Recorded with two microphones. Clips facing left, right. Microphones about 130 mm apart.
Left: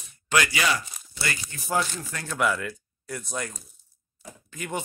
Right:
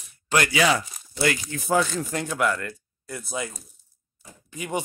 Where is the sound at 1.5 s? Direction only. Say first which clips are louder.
Right 10 dB; 90° right.